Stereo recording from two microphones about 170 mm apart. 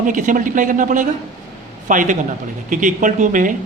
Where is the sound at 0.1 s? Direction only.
50° right (ahead or behind).